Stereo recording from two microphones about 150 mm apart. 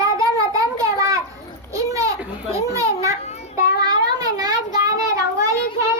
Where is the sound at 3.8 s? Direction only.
25° right (ahead or behind).